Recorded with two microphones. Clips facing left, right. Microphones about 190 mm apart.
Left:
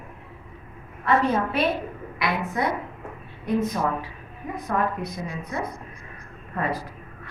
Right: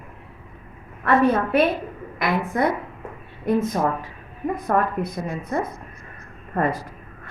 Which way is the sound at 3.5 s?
45° right (ahead or behind).